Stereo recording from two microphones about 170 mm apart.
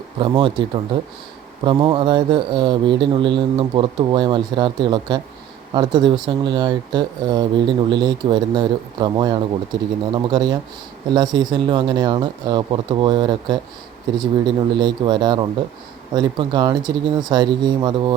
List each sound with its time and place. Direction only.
0.2 s speech: 30° right (ahead or behind)